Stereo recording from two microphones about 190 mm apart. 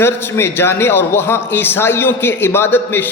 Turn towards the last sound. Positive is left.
turn(degrees=10)  # may be behind; listen again after turning